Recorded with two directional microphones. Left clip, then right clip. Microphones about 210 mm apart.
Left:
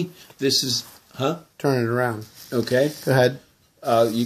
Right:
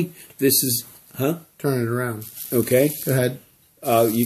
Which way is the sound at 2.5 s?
35° right (ahead or behind).